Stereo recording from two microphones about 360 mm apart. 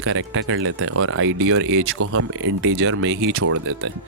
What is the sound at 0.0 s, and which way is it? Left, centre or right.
Speech, right.